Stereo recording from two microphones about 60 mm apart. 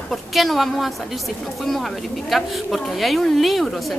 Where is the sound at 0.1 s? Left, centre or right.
Centre.